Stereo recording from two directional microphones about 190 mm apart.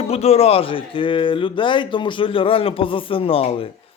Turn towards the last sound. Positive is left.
turn(degrees=30)  # may be behind; listen again after turning